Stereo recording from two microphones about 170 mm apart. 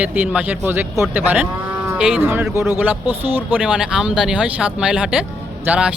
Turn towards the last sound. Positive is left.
turn(degrees=-10)  # may be behind; listen again after turning